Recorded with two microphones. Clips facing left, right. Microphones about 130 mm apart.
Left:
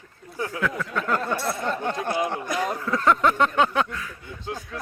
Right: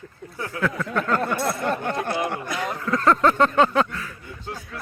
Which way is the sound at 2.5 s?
40° left (ahead or behind).